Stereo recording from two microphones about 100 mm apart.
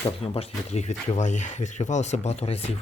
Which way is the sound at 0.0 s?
90° left.